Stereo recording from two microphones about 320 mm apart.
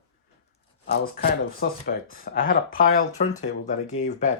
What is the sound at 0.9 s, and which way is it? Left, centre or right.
Speech, left.